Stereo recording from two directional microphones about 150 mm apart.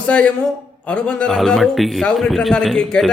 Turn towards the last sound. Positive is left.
turn(degrees=5)  # may be behind; listen again after turning